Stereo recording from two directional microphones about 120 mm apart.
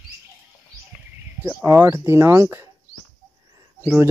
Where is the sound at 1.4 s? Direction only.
15° right (ahead or behind).